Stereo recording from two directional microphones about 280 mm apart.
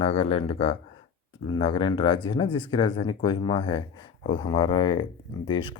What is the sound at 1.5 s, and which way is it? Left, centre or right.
Speech, centre.